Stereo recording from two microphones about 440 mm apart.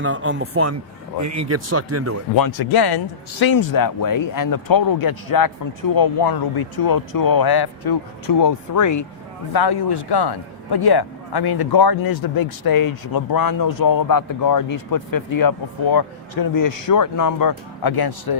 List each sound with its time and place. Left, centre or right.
0.0 s speech: right
2.3 s speech: left
3.7 s speech: left
9.5 s a man's voice: left